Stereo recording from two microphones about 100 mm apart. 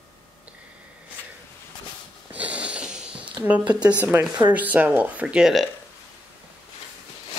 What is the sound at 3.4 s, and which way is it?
Speech, 15° right (ahead or behind).